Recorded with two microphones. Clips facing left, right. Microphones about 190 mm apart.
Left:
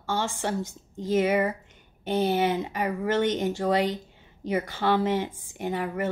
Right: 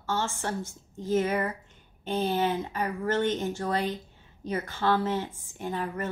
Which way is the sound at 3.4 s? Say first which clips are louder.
Left 5 dB; 15° left (ahead or behind).